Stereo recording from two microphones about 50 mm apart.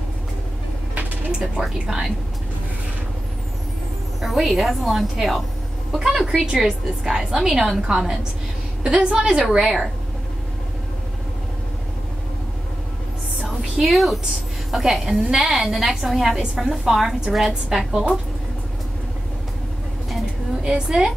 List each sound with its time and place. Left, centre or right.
1.4 s a woman's voice: centre
4.2 s a woman's voice: centre
13.8 s a woman's voice: centre
20.6 s a woman's voice: centre